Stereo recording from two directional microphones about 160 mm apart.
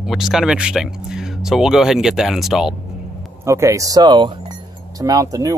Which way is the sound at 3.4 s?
20° right (ahead or behind).